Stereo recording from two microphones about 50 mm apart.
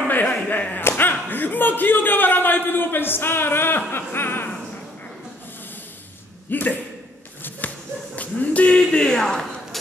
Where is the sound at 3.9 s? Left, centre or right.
Left.